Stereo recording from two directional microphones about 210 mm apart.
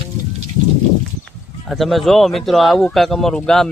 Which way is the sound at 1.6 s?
Centre (ahead or behind).